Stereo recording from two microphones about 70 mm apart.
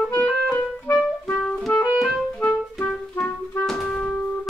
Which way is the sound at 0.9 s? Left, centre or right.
Left.